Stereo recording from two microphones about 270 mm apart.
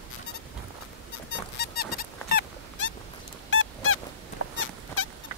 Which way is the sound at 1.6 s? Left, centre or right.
Left.